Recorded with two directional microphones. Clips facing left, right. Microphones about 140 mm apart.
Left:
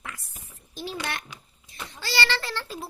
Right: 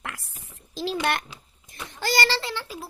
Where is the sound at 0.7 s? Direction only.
90° right.